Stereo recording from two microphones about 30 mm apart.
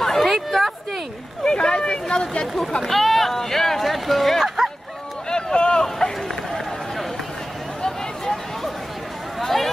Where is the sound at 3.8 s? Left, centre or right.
Centre.